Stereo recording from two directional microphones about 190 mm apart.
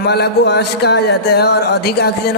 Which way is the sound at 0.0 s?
60° left (ahead or behind).